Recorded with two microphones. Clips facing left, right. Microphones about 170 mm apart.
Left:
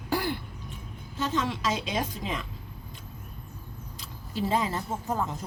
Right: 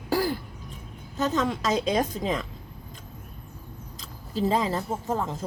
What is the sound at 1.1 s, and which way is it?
A woman's voice, 45° right (ahead or behind).